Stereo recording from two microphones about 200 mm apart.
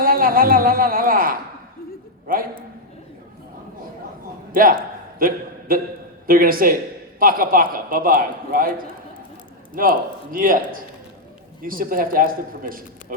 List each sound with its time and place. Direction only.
0.0 s a woman's voice: 45° right (ahead or behind)
4.5 s a man's voice: 45° right (ahead or behind)